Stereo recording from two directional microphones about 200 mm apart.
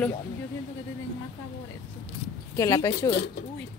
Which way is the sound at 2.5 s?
15° left (ahead or behind).